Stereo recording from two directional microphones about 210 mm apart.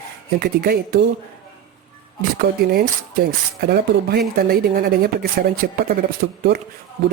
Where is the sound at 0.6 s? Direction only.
50° right (ahead or behind).